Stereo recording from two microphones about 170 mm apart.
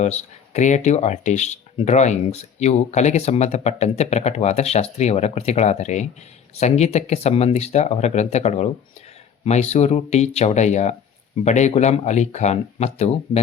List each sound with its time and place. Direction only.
0.0 s speech: 40° left (ahead or behind)